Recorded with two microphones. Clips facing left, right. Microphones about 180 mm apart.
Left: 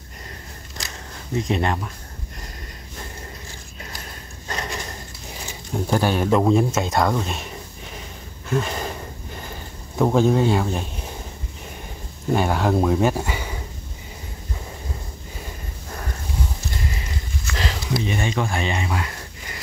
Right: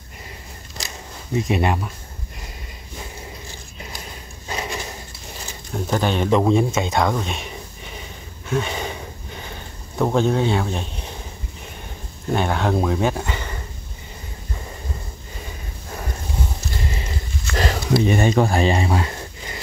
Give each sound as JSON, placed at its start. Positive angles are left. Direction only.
{"t": 1.4, "sound": "speech", "side_deg": -10}
{"t": 4.5, "sound": "a sound", "side_deg": -10}
{"t": 5.7, "sound": "speech", "side_deg": 10}
{"t": 8.5, "sound": "sniff", "side_deg": 0}
{"t": 12.3, "sound": "speech", "side_deg": 5}
{"t": 17.5, "sound": "a sound", "side_deg": -50}
{"t": 18.0, "sound": "speech", "side_deg": -45}